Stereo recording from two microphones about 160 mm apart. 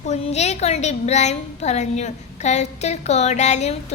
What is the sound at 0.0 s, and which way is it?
Child singing, 45° left (ahead or behind).